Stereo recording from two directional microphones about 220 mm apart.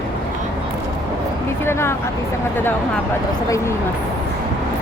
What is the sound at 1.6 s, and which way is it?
Speech, 10° left (ahead or behind).